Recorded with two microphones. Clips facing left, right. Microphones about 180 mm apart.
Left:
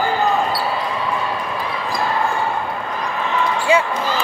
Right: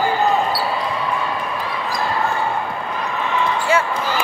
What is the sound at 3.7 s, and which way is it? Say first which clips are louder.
Basketball bounce: left 3 dB; 15° left (ahead or behind).